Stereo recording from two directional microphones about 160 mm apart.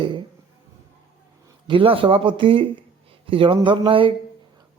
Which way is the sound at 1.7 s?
35° right (ahead or behind).